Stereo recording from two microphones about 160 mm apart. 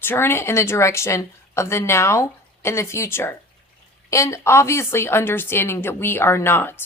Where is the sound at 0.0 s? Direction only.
15° left (ahead or behind).